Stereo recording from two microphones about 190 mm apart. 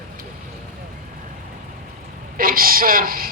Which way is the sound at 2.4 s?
50° right (ahead or behind).